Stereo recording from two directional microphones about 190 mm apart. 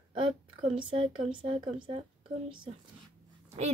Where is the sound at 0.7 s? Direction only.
25° right (ahead or behind).